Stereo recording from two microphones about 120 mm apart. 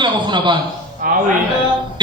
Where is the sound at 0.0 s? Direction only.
40° right (ahead or behind).